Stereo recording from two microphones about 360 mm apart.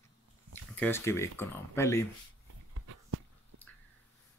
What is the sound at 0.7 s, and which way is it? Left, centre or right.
Speech, centre.